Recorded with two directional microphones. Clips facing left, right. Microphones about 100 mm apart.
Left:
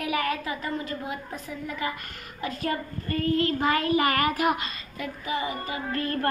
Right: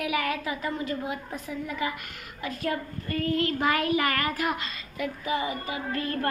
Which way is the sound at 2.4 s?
Centre (ahead or behind).